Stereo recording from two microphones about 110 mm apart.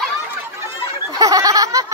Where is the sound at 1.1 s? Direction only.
35° right (ahead or behind).